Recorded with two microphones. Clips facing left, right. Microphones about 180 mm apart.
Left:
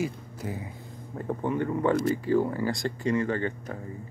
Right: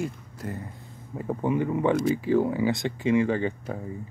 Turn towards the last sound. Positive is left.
turn(degrees=-10)  # may be behind; listen again after turning